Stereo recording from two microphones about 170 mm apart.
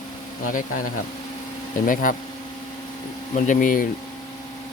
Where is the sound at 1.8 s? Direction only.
50° left (ahead or behind).